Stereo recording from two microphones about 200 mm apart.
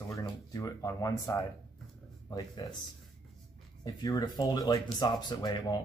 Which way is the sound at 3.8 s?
20° left (ahead or behind).